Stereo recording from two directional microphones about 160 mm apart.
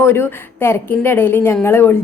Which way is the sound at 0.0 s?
15° left (ahead or behind).